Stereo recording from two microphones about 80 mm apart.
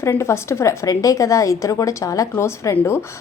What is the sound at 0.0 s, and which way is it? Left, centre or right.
A woman's voice, left.